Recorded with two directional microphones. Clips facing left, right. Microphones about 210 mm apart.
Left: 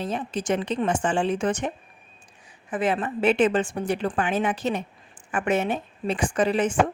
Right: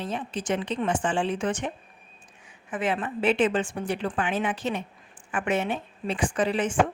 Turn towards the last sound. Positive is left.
turn(degrees=40)  # may be behind; listen again after turning